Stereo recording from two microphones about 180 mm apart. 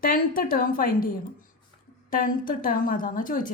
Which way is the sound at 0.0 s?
55° left (ahead or behind).